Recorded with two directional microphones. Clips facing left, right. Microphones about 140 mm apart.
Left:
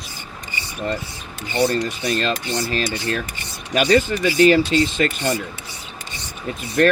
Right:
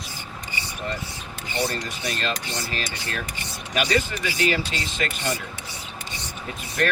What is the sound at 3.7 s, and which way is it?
Speech, 35° left (ahead or behind).